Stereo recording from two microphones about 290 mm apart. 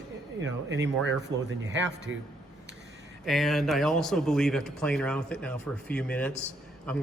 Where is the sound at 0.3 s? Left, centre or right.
Right.